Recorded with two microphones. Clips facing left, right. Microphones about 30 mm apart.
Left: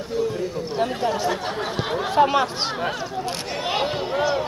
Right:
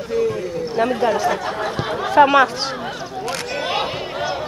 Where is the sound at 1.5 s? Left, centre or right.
Centre.